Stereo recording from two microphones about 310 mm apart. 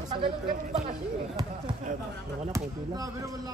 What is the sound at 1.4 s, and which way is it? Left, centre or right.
Basketball bounce, centre.